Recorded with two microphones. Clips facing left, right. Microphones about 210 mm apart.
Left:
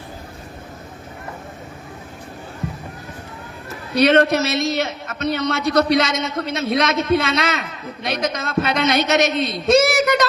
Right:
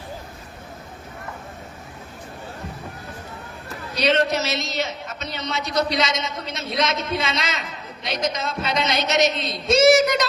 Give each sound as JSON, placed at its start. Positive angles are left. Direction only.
{"t": 3.9, "sound": "a man's voice", "side_deg": 60}